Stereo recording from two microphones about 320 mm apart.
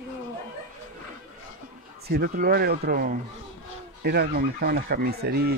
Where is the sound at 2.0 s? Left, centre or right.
Right.